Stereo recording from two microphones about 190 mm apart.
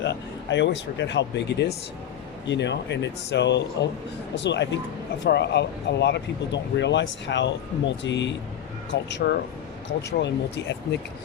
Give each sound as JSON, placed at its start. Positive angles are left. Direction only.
{"t": 0.0, "sound": "speech", "side_deg": 70}